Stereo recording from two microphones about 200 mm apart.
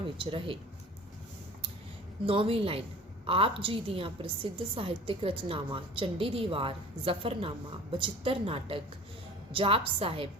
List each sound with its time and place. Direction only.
0.0 s a woman's voice: 25° right (ahead or behind)
2.2 s a woman's voice: 25° right (ahead or behind)